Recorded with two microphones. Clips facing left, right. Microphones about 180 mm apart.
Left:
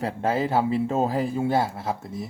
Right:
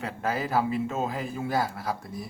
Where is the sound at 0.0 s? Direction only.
30° left (ahead or behind).